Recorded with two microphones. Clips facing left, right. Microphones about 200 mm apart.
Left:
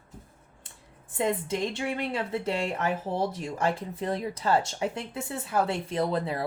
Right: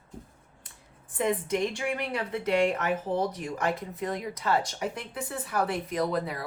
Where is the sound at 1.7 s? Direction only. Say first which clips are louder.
Left 1 dB; 25° left (ahead or behind).